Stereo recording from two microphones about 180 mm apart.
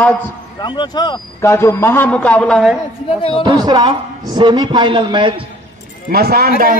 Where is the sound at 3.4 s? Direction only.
20° right (ahead or behind).